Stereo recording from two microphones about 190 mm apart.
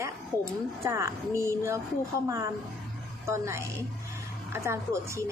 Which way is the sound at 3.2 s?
15° right (ahead or behind).